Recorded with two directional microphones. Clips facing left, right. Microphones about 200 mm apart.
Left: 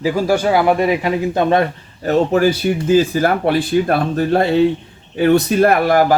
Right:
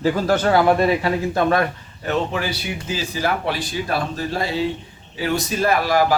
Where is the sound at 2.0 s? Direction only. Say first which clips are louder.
Left 9 dB; 40° left (ahead or behind).